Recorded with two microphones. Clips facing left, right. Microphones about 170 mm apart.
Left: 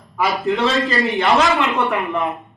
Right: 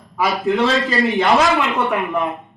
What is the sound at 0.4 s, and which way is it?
A man's voice, centre (ahead or behind).